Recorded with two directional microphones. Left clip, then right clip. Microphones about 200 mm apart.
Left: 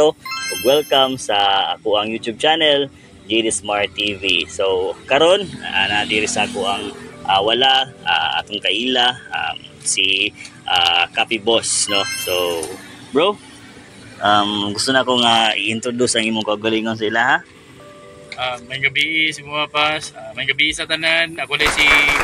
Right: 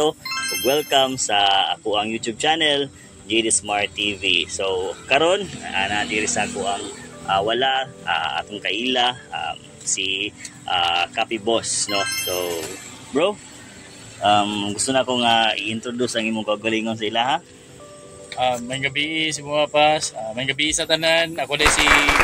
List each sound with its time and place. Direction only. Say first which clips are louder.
0.0 s speech: left 5 dB; centre (ahead or behind)
18.4 s speech: left 1 dB; 55° right (ahead or behind)
21.6 s speech: left 2 dB; centre (ahead or behind)